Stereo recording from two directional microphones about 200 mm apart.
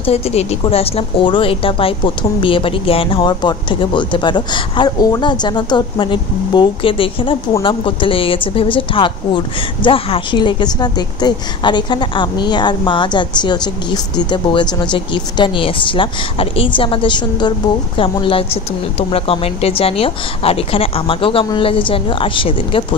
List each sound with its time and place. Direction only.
0.0 s a woman's voice: 30° left (ahead or behind)